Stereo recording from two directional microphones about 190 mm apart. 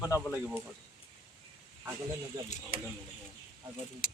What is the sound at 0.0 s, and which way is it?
Speech, 15° left (ahead or behind).